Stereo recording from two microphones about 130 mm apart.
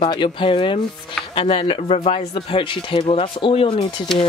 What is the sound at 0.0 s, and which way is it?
Speech, 40° left (ahead or behind).